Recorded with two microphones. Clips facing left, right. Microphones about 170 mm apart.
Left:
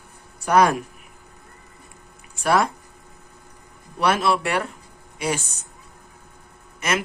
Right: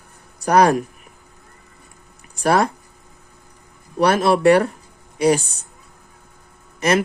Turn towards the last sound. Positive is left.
turn(degrees=-35)  # may be behind; listen again after turning